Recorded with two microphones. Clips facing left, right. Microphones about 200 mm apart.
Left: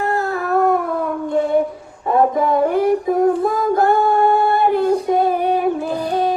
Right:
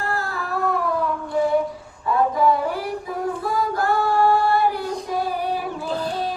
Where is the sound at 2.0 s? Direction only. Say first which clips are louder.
Left 3 dB; 50° left (ahead or behind).